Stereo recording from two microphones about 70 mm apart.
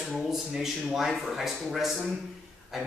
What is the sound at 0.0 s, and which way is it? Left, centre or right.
A man's voice, centre.